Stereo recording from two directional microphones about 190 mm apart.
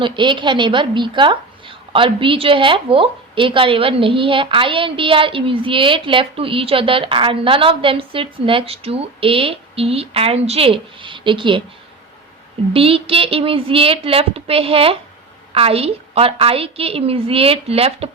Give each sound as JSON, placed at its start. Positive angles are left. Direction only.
{"t": 0.0, "sound": "a woman's voice", "side_deg": -25}
{"t": 12.7, "sound": "a woman's voice", "side_deg": -30}